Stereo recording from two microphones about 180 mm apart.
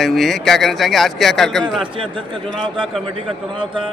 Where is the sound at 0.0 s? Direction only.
Centre (ahead or behind).